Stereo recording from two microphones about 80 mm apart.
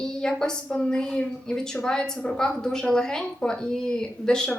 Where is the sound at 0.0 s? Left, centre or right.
Centre.